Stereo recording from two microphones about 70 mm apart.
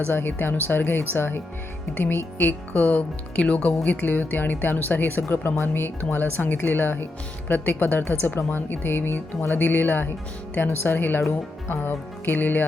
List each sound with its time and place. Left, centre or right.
0.1 s speech: left